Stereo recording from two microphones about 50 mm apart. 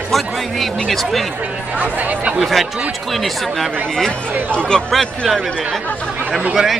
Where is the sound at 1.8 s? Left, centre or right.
Right.